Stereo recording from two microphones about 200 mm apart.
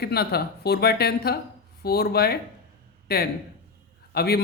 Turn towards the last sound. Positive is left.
turn(degrees=50)  # may be behind; listen again after turning